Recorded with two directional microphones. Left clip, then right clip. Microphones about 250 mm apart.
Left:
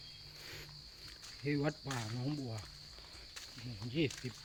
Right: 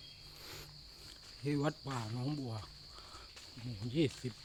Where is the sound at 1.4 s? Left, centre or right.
Centre.